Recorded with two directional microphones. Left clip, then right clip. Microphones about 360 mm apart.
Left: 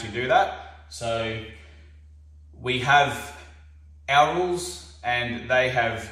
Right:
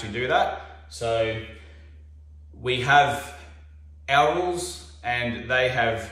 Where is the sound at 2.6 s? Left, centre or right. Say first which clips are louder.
Right 1 dB; centre.